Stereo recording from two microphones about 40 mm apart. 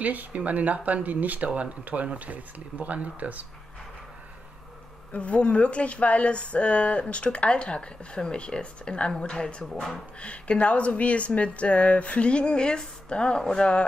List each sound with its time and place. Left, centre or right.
0.0 s speech: right
5.1 s speech: left
10.2 s speech: left